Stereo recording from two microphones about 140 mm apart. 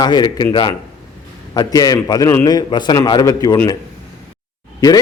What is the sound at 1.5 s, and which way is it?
A man's voice, 25° left (ahead or behind).